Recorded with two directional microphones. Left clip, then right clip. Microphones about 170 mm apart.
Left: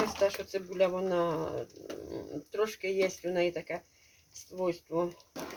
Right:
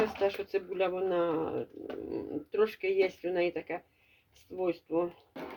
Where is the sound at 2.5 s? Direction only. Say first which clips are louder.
Right 3 dB; 40° right (ahead or behind).